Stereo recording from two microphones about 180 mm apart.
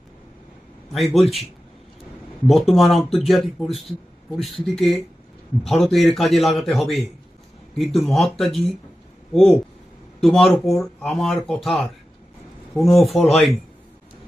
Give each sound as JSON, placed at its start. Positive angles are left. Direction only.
{"t": 0.9, "sound": "speech", "side_deg": 0}
{"t": 1.2, "sound": "speech", "side_deg": 35}
{"t": 2.5, "sound": "speech", "side_deg": 0}